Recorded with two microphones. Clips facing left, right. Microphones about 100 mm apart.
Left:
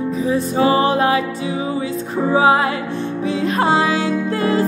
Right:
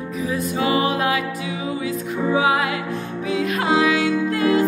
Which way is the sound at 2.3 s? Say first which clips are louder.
Left 6 dB; 35° left (ahead or behind).